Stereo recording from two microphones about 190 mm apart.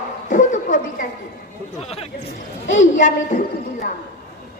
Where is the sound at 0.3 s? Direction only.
40° left (ahead or behind).